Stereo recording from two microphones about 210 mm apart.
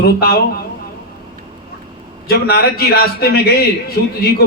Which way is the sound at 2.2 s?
50° left (ahead or behind).